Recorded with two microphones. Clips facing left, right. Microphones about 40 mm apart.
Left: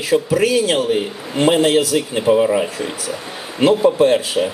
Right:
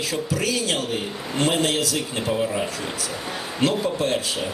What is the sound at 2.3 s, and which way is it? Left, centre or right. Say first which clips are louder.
A man's voice: left 11 dB; left.